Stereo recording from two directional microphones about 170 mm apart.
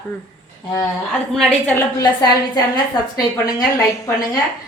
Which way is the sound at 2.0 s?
25° left (ahead or behind).